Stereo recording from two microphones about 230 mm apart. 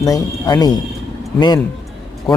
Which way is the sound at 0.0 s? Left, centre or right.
Centre.